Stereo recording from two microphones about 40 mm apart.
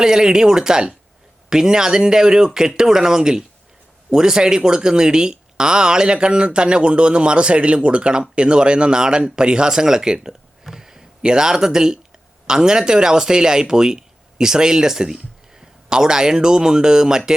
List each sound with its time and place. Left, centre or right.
0.0 s speech: centre